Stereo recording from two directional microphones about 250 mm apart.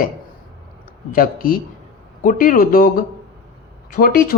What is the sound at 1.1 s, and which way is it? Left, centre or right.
Speech, left.